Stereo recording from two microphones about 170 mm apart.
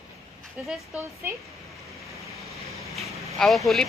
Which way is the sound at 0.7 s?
10° right (ahead or behind).